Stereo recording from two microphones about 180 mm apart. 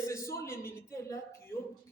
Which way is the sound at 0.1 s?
15° left (ahead or behind).